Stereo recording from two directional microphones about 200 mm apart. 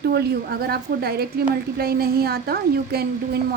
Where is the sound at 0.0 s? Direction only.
50° right (ahead or behind).